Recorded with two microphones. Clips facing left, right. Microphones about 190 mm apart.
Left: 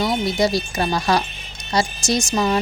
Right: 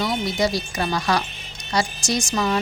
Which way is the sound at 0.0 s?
25° left (ahead or behind).